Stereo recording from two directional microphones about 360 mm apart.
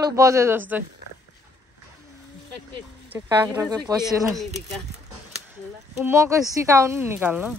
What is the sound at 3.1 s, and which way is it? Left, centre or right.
Speech, centre.